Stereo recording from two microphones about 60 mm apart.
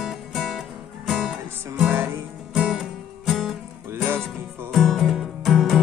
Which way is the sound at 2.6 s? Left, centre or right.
Centre.